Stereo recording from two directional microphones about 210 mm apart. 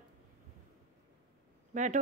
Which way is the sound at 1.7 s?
35° right (ahead or behind).